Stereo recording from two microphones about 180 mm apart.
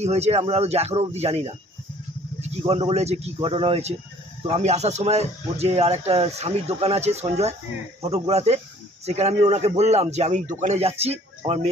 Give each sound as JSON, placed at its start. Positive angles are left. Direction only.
{"t": 0.0, "sound": "speech", "side_deg": -35}
{"t": 2.6, "sound": "speech", "side_deg": -35}